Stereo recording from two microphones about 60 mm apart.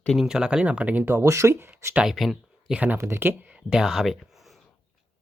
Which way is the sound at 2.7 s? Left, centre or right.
Right.